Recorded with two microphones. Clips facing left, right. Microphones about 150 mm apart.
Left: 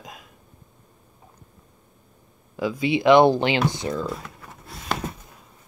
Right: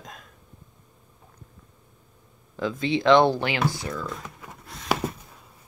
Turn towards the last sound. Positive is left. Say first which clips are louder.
# right 3 dB
turn(degrees=-10)  # may be behind; listen again after turning